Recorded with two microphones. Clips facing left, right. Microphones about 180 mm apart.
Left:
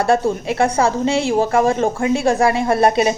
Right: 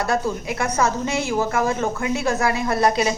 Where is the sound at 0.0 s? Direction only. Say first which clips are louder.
Left 6 dB; 30° left (ahead or behind).